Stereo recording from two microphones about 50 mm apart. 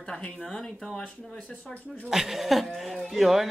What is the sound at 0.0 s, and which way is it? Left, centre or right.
Speech, centre.